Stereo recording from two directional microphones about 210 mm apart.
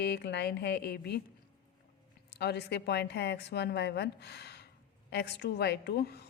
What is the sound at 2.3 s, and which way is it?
Speech, 50° left (ahead or behind).